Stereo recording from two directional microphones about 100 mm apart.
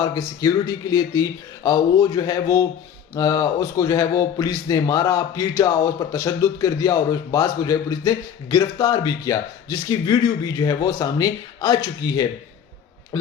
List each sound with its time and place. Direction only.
0.0 s a man's voice: 35° left (ahead or behind)